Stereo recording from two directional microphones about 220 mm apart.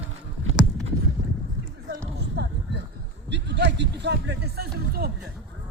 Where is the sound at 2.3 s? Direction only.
50° right (ahead or behind).